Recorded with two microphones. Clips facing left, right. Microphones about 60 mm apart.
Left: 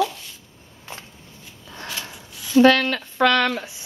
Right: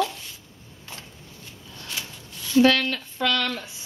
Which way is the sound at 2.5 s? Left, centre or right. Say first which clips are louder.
Left 4 dB; left.